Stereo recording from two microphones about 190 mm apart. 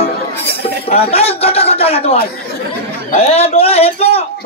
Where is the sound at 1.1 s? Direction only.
30° left (ahead or behind).